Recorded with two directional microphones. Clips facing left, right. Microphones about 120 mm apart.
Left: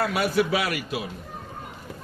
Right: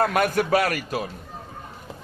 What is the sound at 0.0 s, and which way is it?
A man's voice, 50° right (ahead or behind).